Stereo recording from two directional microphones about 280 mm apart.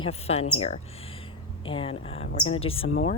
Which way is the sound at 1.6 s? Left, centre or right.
Centre.